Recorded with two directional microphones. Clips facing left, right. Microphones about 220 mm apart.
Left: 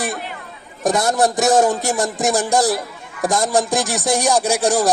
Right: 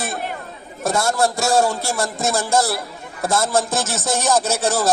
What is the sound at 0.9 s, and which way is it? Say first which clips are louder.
Speech: left 2 dB; 20° left (ahead or behind).